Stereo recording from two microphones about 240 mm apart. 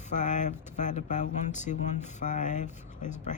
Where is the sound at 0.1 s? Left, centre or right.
Left.